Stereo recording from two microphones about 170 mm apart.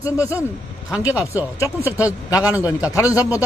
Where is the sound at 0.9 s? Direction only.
5° right (ahead or behind).